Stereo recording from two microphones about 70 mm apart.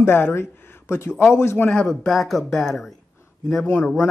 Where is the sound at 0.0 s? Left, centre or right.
Left.